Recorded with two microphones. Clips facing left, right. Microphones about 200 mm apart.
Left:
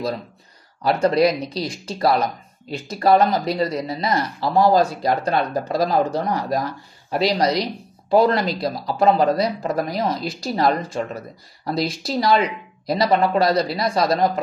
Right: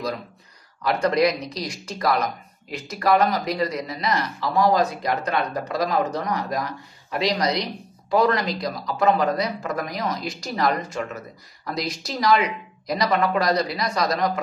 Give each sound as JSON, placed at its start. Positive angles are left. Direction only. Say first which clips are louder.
{"t": 0.8, "sound": "speech", "louder": "left 3 dB", "side_deg": 30}